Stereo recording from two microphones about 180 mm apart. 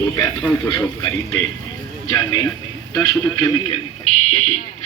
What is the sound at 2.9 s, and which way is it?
Speech, 25° left (ahead or behind).